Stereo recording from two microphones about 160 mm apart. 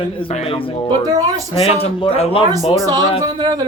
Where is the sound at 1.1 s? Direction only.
20° right (ahead or behind).